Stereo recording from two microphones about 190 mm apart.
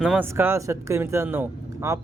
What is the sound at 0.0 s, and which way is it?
Speech, 5° right (ahead or behind).